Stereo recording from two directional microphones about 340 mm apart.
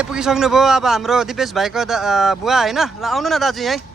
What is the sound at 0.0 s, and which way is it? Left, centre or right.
A man's voice, centre.